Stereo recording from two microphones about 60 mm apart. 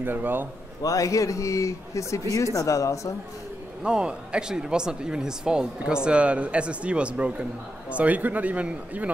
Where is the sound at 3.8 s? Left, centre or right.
Centre.